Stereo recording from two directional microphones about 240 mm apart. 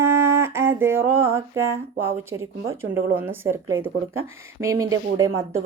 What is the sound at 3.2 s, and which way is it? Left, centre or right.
A woman's voice, centre.